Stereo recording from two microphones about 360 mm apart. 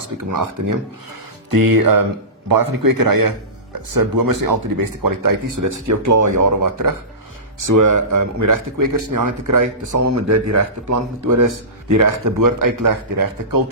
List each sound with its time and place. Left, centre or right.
0.3 s speech: right
1.5 s a man's voice: right